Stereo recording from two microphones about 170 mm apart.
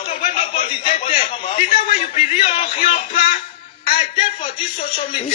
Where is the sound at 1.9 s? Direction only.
40° left (ahead or behind).